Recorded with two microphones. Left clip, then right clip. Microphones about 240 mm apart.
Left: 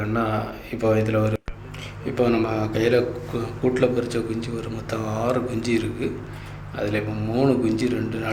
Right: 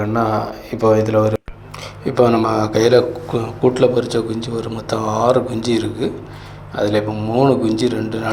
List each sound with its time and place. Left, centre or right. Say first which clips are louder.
0.0 s a man's voice: right 7 dB; centre
1.8 s a man's voice: right 8 dB; right